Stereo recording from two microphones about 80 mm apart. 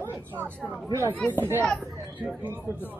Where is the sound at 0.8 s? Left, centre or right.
Right.